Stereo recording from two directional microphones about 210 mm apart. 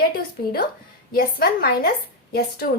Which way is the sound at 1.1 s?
45° left (ahead or behind).